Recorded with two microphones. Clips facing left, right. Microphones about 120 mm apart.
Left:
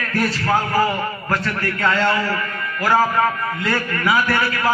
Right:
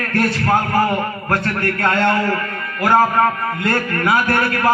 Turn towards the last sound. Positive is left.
turn(degrees=-55)  # may be behind; listen again after turning